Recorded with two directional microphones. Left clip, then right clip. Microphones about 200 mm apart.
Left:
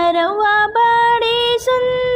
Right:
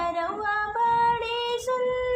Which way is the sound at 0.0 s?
40° left (ahead or behind).